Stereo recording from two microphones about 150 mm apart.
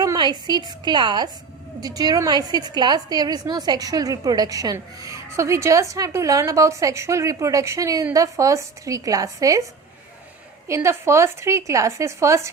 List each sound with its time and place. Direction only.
0.0 s a woman's voice: 25° right (ahead or behind)
10.7 s a woman's voice: 15° right (ahead or behind)